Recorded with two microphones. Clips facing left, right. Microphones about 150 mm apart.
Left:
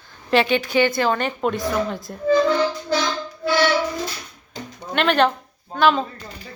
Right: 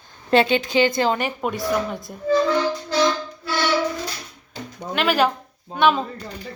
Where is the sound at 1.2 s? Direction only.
5° right (ahead or behind).